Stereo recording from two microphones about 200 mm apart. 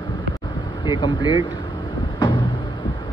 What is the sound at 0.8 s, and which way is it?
Speech, 20° left (ahead or behind).